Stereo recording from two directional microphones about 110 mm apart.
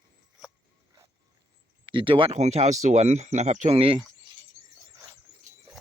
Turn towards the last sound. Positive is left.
turn(degrees=-25)  # may be behind; listen again after turning